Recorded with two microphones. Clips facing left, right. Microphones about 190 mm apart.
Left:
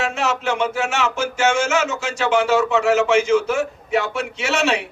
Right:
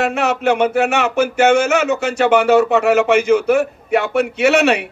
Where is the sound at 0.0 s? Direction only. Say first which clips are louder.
Right 5 dB; 60° right (ahead or behind).